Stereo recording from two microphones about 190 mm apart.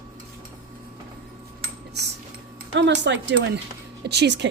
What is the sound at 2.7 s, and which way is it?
Speech, 65° right (ahead or behind).